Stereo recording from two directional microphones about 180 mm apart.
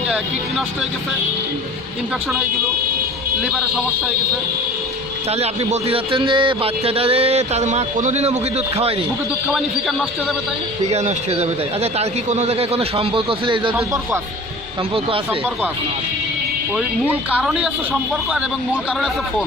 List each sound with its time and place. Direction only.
5.3 s speech: 35° right (ahead or behind)
9.5 s speech: 5° right (ahead or behind)
10.8 s speech: 35° right (ahead or behind)
13.7 s speech: 15° right (ahead or behind)
16.7 s speech: centre (ahead or behind)